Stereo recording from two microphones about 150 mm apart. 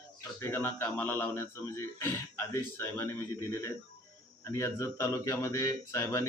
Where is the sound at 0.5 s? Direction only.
10° left (ahead or behind).